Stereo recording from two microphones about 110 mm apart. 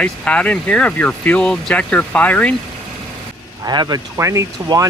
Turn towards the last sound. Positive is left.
turn(degrees=-30)  # may be behind; listen again after turning